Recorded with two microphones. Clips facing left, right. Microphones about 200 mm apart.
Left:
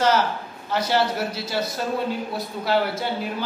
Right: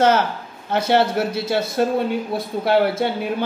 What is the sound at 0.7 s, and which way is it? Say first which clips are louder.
A man's voice: right 4 dB; 55° right (ahead or behind).